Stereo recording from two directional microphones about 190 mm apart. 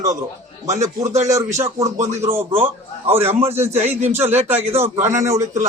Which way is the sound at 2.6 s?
10° right (ahead or behind).